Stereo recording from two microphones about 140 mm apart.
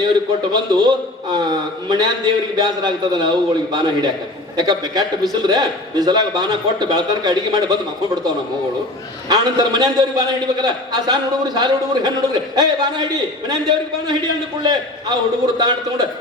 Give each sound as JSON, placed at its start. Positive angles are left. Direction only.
{"t": 0.5, "sound": "a man's voice", "side_deg": -30}
{"t": 9.3, "sound": "a man's voice", "side_deg": -30}
{"t": 14.6, "sound": "a man's voice", "side_deg": -30}